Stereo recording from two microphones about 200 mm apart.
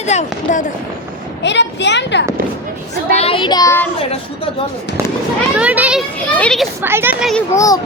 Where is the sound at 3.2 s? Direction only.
25° left (ahead or behind).